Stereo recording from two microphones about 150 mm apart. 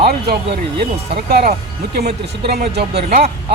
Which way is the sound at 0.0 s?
90° right.